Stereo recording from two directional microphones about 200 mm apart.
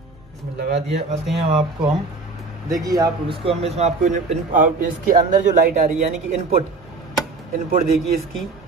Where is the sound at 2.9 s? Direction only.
20° right (ahead or behind); by 6.0 s 40° right (ahead or behind).